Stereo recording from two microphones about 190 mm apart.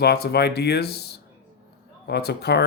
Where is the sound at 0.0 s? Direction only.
60° left (ahead or behind).